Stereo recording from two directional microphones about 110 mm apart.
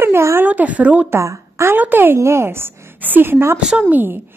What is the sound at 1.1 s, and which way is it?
A woman's voice, 25° right (ahead or behind).